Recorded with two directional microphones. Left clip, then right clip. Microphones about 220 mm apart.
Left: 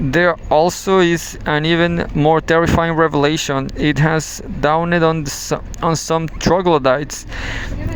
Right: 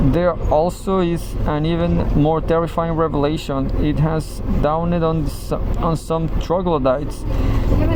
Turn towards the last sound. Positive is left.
turn(degrees=50)  # may be behind; listen again after turning